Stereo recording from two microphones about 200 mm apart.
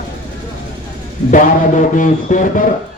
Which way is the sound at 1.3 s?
40° left (ahead or behind).